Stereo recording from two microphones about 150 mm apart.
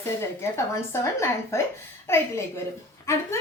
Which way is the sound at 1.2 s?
20° left (ahead or behind).